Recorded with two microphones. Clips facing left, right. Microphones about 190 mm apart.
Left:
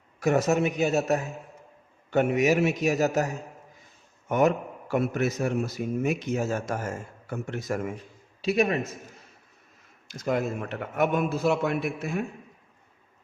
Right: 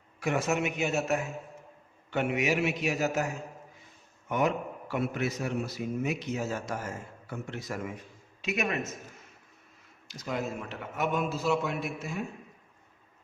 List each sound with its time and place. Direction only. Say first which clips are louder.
0.2 s a man's voice: left 6 dB; 40° left (ahead or behind)
8.4 s a man's voice: left 7 dB; 35° left (ahead or behind)
10.1 s a man's voice: left 6 dB; 50° left (ahead or behind)